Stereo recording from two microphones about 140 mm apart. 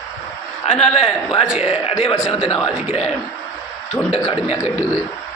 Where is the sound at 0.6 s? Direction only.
50° left (ahead or behind).